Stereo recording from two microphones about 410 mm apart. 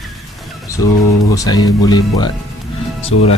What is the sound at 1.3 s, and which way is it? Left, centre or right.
Speech, centre.